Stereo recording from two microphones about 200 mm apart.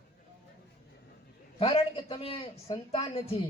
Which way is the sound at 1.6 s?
25° left (ahead or behind).